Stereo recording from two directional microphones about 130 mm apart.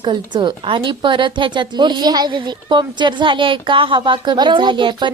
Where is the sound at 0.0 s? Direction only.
35° right (ahead or behind).